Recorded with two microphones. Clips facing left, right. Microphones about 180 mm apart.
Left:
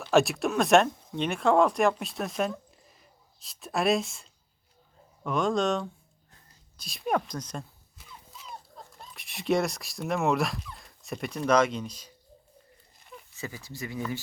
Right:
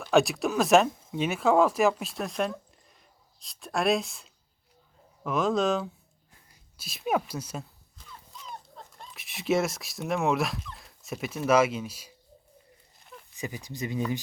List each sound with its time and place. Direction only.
0.0 s speech: centre (ahead or behind)
7.9 s speech: 5° left (ahead or behind)
13.3 s speech: 15° right (ahead or behind)